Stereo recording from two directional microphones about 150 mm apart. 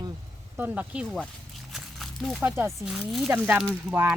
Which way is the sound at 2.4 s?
15° right (ahead or behind).